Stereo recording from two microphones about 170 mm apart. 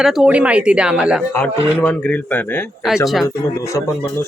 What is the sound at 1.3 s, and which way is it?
A man's voice, 10° left (ahead or behind).